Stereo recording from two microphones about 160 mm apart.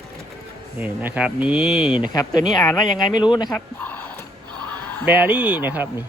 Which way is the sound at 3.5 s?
10° left (ahead or behind).